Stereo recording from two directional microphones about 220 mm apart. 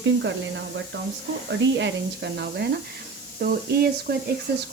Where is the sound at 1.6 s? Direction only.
55° right (ahead or behind).